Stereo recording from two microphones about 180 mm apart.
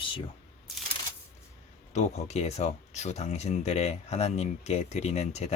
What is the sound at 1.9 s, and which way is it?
Speech, 35° left (ahead or behind).